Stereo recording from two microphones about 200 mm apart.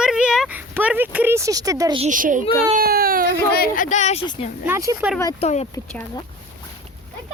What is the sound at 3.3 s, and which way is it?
Speech, 45° left (ahead or behind).